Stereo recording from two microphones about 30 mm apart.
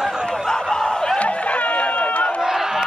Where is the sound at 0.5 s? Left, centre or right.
Left.